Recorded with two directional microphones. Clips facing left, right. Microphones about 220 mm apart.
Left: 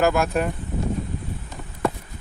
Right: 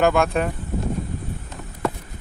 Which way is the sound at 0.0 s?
Centre (ahead or behind).